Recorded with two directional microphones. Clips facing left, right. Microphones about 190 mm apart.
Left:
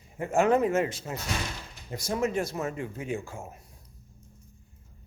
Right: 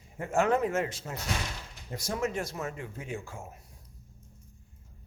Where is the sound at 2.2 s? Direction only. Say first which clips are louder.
Left 4 dB; 10° left (ahead or behind).